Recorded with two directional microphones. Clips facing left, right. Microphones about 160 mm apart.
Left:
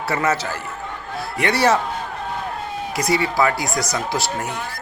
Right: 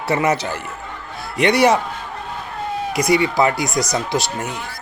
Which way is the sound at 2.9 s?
20° right (ahead or behind).